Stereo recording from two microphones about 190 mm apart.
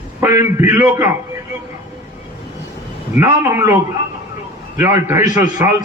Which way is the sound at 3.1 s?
15° right (ahead or behind).